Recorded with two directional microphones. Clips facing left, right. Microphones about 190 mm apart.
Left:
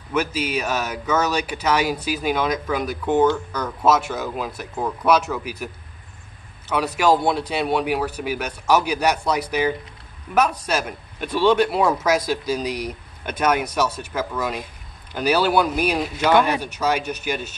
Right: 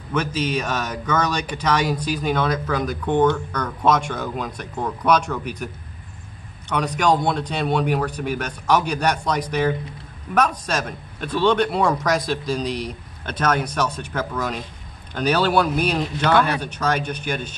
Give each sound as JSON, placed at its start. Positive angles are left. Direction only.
{"t": 0.1, "sound": "speech", "side_deg": 10}
{"t": 7.0, "sound": "speech", "side_deg": 5}